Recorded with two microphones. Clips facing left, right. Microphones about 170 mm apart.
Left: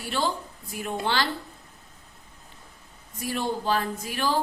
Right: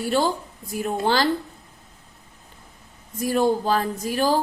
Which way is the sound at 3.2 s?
40° right (ahead or behind).